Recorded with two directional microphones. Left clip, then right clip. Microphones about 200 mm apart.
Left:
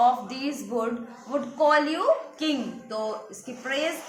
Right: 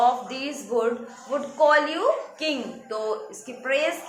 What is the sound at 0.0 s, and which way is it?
A woman's voice, 25° left (ahead or behind).